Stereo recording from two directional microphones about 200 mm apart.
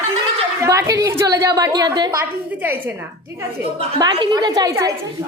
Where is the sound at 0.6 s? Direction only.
15° right (ahead or behind).